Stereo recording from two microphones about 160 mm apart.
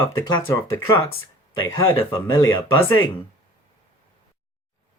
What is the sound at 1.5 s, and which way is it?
Speech, 30° left (ahead or behind).